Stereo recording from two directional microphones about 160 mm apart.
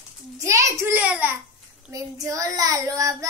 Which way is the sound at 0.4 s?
20° right (ahead or behind).